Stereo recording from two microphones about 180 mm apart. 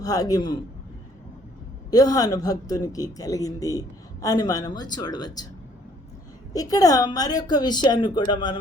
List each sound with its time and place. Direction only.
0.0 s a woman's voice: 20° left (ahead or behind)
1.9 s a woman's voice: 20° left (ahead or behind)
6.5 s a woman's voice: 20° left (ahead or behind)